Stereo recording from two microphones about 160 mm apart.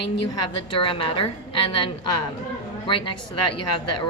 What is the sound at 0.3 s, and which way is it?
A woman's voice, 35° left (ahead or behind).